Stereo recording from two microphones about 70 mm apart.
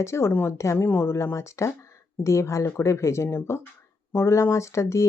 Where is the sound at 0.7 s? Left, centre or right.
Left.